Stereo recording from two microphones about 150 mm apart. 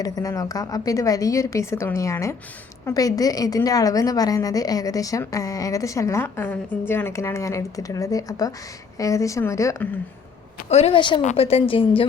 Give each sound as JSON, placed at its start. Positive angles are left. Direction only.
{"t": 0.0, "sound": "a woman's voice", "side_deg": 25}
{"t": 10.7, "sound": "a woman's voice", "side_deg": 45}
{"t": 11.2, "sound": "a woman's voice", "side_deg": 45}